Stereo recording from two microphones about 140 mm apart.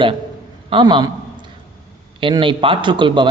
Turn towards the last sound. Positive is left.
turn(degrees=-35)  # may be behind; listen again after turning